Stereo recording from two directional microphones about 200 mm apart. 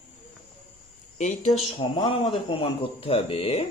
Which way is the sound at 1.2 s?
40° left (ahead or behind).